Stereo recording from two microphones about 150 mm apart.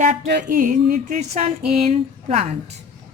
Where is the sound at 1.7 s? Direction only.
45° right (ahead or behind).